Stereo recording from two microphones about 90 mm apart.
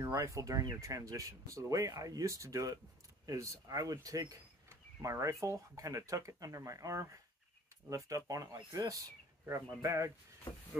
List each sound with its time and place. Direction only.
0.0 s speech: 35° right (ahead or behind)